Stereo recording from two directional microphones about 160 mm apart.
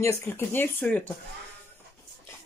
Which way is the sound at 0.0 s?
15° left (ahead or behind).